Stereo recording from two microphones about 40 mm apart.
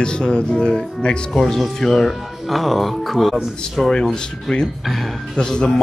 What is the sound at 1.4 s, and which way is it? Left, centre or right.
Speech, centre.